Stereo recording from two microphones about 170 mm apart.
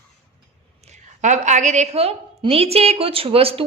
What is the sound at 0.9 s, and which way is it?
A woman's voice, 45° right (ahead or behind).